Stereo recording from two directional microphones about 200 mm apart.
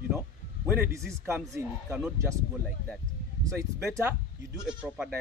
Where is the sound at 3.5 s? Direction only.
15° right (ahead or behind).